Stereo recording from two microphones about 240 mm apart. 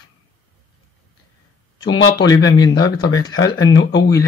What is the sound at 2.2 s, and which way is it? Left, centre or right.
Speech, centre.